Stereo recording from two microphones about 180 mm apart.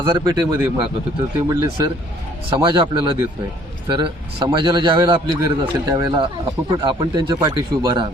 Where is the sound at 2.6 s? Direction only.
25° right (ahead or behind).